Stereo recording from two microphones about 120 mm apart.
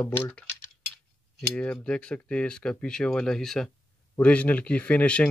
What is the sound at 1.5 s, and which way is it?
Speech, 10° left (ahead or behind).